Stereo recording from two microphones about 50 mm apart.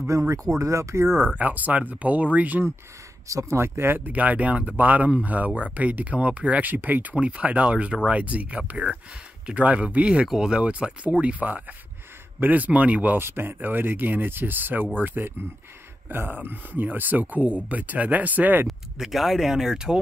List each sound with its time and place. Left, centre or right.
0.1 s speech: right
1.2 s speech: right
3.3 s speech: right
4.0 s speech: right
10.2 s speech: centre; by 13.2 s right
13.2 s speech: right
13.6 s speech: right
18.7 s speech: centre